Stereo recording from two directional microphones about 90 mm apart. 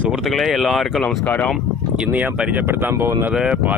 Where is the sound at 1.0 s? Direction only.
20° left (ahead or behind).